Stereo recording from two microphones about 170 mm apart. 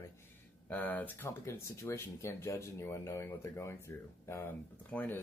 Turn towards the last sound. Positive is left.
turn(degrees=10)  # may be behind; listen again after turning